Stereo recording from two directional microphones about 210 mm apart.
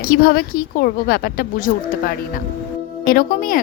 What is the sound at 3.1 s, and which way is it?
Speech, 40° left (ahead or behind).